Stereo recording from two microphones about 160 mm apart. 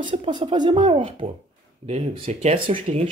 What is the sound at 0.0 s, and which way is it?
Speech, 35° right (ahead or behind).